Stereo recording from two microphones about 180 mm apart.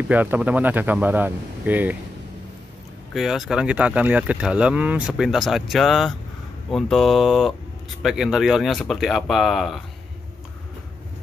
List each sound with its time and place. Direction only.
0.1 s speech: 10° right (ahead or behind)
3.1 s speech: centre (ahead or behind)